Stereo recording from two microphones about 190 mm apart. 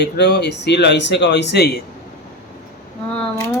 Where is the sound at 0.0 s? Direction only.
60° left (ahead or behind).